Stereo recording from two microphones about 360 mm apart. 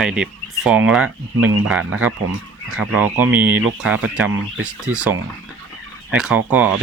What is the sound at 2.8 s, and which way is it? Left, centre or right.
Speech, centre.